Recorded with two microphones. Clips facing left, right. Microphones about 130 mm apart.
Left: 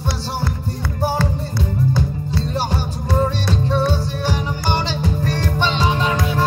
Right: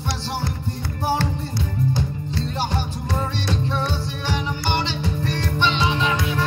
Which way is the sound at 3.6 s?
45° left (ahead or behind).